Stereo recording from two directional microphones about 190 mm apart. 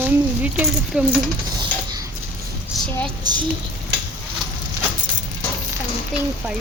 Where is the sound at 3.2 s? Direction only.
20° right (ahead or behind).